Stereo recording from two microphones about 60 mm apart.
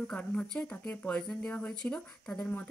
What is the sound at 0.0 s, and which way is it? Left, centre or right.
Speech, left.